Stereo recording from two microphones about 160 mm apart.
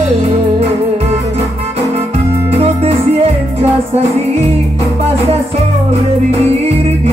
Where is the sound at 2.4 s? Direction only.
40° right (ahead or behind).